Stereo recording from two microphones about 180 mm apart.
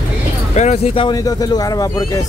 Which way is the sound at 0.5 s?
35° left (ahead or behind).